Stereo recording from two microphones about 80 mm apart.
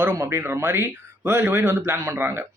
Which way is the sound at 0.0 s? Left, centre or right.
Right.